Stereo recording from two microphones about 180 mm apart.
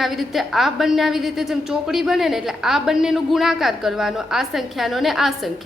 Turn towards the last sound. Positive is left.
turn(degrees=0)  # may be behind; listen again after turning